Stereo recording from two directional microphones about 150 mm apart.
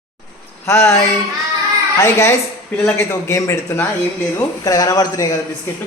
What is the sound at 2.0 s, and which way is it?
A man's voice, 20° left (ahead or behind).